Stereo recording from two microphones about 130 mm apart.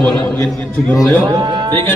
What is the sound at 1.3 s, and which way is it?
Speech, 30° right (ahead or behind).